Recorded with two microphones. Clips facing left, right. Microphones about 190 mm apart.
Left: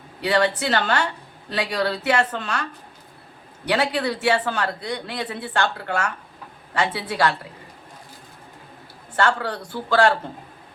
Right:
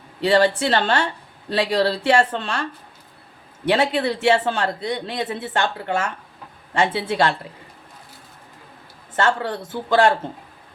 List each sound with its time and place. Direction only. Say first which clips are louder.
0.2 s speech: right 4 dB; 30° right (ahead or behind)
3.7 s speech: right 3 dB; 25° right (ahead or behind)
9.1 s speech: right 1 dB; 20° right (ahead or behind)